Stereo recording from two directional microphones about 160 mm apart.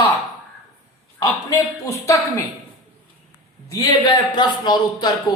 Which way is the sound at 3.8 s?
30° left (ahead or behind).